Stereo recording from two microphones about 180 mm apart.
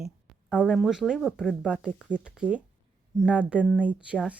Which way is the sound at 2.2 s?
5° right (ahead or behind).